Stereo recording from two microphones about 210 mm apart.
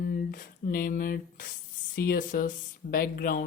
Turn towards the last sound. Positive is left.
turn(degrees=45)  # may be behind; listen again after turning